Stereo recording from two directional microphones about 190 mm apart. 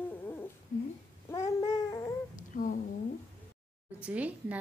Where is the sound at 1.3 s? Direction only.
20° left (ahead or behind).